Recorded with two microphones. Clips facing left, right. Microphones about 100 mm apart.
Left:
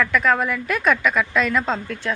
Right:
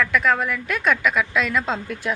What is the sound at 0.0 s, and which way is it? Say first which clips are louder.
A woman's voice: left 1 dB; centre (ahead or behind).